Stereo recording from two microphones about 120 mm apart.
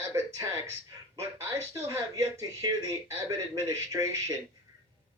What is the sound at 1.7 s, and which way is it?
Speech, 25° right (ahead or behind).